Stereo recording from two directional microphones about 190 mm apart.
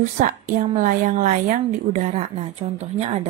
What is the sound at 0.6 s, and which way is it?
A woman's voice, 40° right (ahead or behind).